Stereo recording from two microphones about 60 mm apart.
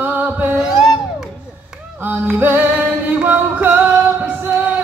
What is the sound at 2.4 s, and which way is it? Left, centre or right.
Music, right.